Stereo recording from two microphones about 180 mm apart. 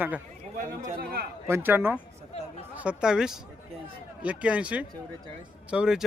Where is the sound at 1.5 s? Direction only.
10° right (ahead or behind).